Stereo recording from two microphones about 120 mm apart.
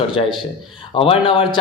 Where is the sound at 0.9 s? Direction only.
50° left (ahead or behind).